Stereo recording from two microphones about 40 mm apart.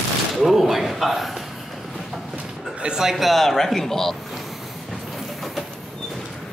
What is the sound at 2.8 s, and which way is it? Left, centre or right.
Speech, centre.